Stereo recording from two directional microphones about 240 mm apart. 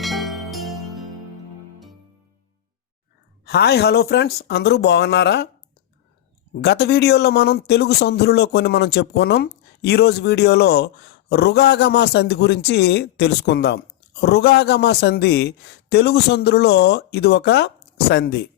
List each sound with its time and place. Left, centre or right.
0.0 s music: centre
3.4 s speech: left
6.6 s speech: left